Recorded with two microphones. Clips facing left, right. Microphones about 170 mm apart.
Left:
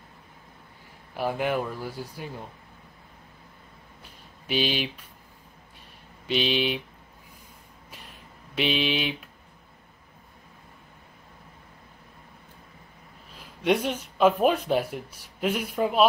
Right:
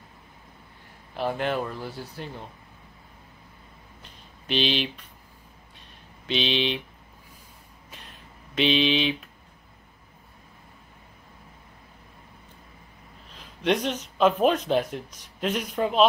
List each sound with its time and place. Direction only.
1.1 s speech: 10° left (ahead or behind)
4.0 s a sound: 10° left (ahead or behind)
6.2 s speech: 10° left (ahead or behind)
8.5 s speech: 10° left (ahead or behind)
13.4 s speech: 10° left (ahead or behind)